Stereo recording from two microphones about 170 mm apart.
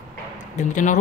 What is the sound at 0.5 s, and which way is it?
Speech, 45° left (ahead or behind).